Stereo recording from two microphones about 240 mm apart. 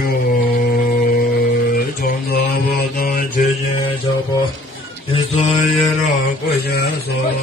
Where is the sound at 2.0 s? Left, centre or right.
Left.